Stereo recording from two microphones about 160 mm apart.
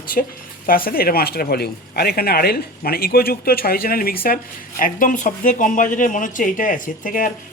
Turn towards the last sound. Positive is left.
turn(degrees=55)  # may be behind; listen again after turning